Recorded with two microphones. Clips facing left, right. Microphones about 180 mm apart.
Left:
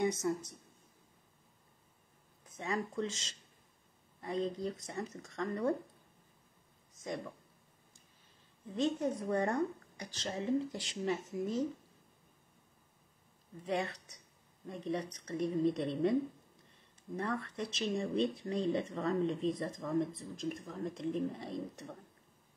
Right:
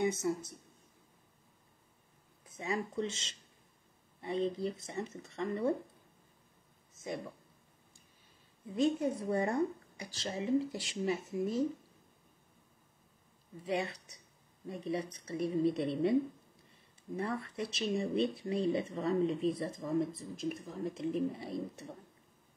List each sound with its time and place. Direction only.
0.3 s a woman's voice: 5° right (ahead or behind)
2.5 s speech: 10° right (ahead or behind)
3.0 s speech: 30° right (ahead or behind)
4.8 s speech: centre (ahead or behind)
7.0 s speech: 5° right (ahead or behind)
8.6 s a woman's voice: 10° right (ahead or behind)
13.7 s a woman's voice: 5° right (ahead or behind)
17.4 s a woman's voice: 5° right (ahead or behind)